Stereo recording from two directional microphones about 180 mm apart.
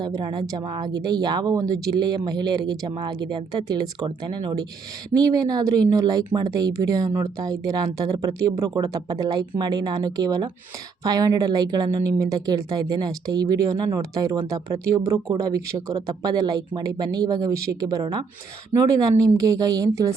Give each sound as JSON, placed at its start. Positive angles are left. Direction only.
{"t": 0.0, "sound": "speech", "side_deg": -25}